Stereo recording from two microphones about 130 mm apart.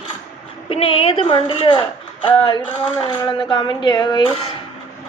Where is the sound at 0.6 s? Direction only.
45° left (ahead or behind).